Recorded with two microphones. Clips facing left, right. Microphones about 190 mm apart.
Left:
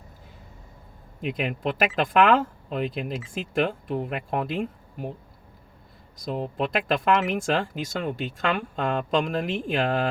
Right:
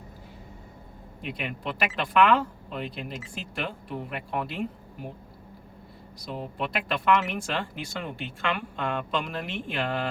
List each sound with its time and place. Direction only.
1.3 s speech: 45° left (ahead or behind)
6.1 s speech: 45° left (ahead or behind)